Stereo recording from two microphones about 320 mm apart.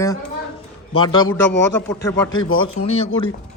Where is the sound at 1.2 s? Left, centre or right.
Left.